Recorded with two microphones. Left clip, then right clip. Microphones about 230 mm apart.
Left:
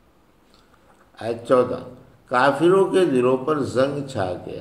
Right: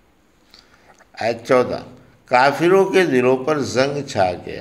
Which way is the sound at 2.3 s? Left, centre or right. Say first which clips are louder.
Right 3 dB; right.